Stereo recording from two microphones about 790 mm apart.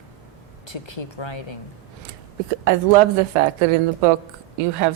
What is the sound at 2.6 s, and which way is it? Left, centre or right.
A woman's voice, right.